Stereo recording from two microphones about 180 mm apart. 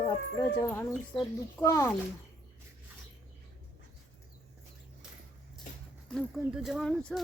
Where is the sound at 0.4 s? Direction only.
15° left (ahead or behind).